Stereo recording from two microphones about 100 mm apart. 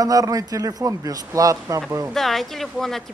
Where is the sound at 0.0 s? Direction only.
35° right (ahead or behind).